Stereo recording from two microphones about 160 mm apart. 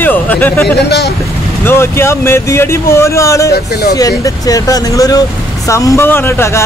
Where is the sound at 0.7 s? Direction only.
90° left.